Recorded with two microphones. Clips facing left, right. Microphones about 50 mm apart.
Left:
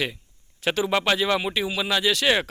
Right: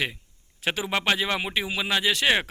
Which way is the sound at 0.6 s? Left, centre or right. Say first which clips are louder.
Left 3 dB; centre.